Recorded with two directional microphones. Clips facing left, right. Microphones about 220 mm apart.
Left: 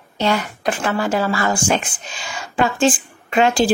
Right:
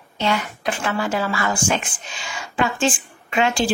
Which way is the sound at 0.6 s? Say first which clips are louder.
Left 3 dB; 40° left (ahead or behind).